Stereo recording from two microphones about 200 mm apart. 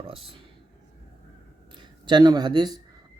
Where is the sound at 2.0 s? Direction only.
20° right (ahead or behind).